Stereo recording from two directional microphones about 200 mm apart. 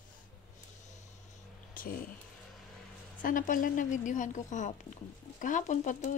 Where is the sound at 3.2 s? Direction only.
40° left (ahead or behind).